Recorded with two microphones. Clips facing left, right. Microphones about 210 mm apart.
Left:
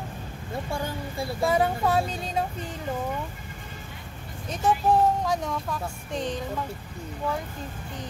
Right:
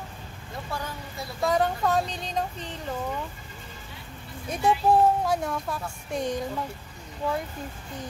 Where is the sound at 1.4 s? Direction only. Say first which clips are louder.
Even; 5° left (ahead or behind).